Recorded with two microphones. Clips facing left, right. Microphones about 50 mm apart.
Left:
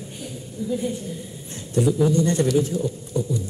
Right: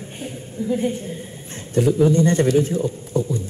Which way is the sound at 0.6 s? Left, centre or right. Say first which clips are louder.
Right 4 dB; right.